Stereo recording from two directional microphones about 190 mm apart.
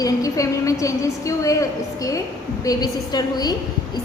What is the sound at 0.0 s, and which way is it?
A woman's voice, 15° left (ahead or behind).